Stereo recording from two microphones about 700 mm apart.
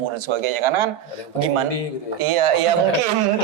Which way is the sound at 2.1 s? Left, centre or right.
Right.